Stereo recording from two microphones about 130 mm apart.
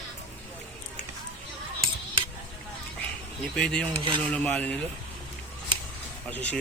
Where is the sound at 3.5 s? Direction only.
5° left (ahead or behind).